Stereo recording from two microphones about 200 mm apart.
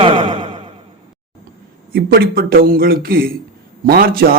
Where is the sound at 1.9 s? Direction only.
50° right (ahead or behind).